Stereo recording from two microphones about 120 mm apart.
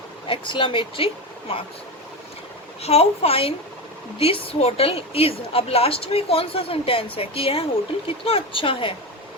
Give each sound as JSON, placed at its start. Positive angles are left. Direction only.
{"t": 0.3, "sound": "a woman's voice", "side_deg": 45}
{"t": 2.8, "sound": "a woman's voice", "side_deg": 60}